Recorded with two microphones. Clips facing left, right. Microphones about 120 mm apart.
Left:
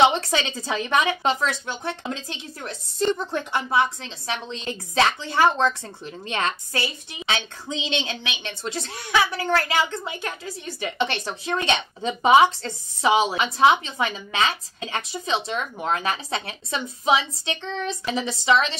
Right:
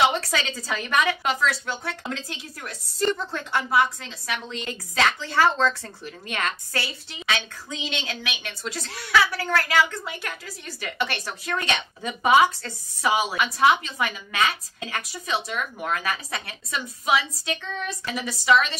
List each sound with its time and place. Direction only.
0.0 s a woman's voice: 25° left (ahead or behind)